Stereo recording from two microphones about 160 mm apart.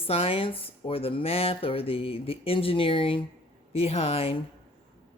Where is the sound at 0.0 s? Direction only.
35° left (ahead or behind).